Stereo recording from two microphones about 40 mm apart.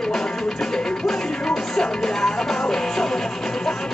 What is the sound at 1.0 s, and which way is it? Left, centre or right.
Music, centre.